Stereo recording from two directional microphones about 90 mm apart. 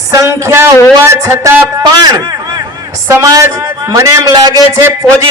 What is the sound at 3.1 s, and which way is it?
A man's voice, 35° right (ahead or behind).